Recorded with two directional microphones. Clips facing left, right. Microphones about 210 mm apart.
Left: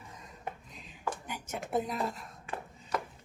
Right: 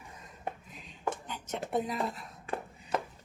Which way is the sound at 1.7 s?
Centre (ahead or behind).